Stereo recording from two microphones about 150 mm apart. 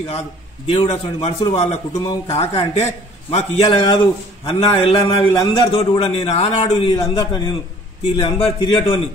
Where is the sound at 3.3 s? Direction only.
40° left (ahead or behind).